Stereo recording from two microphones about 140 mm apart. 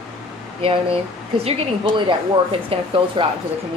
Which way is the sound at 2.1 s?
35° right (ahead or behind).